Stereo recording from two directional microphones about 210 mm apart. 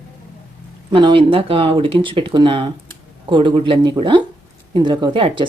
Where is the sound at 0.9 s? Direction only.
25° right (ahead or behind).